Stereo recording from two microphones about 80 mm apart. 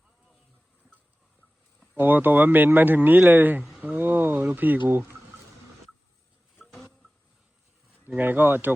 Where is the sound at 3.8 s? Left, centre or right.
Right.